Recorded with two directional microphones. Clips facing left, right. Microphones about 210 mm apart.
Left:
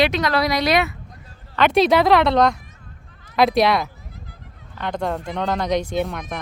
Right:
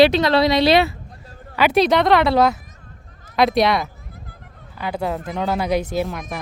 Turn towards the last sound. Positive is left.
turn(degrees=0)  # may be behind; listen again after turning